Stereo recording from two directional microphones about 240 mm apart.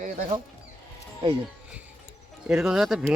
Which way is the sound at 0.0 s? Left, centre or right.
Right.